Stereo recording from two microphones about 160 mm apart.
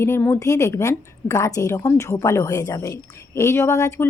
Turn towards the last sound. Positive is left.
turn(degrees=20)  # may be behind; listen again after turning